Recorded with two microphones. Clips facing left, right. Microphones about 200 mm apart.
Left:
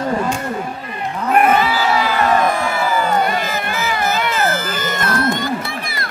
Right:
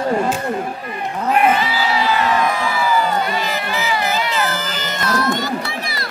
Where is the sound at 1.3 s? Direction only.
50° left (ahead or behind).